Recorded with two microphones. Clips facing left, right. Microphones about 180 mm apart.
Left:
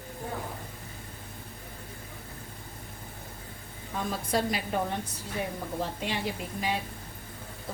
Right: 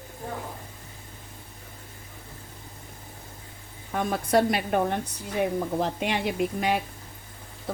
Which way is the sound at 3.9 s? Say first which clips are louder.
Right 7 dB; 65° right (ahead or behind).